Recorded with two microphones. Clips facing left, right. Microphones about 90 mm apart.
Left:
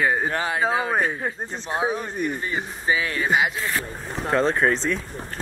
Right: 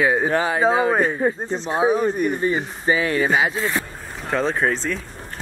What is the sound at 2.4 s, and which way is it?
Speech, 35° right (ahead or behind).